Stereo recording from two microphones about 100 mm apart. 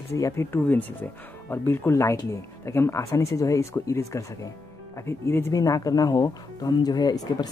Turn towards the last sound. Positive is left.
turn(degrees=40)  # may be behind; listen again after turning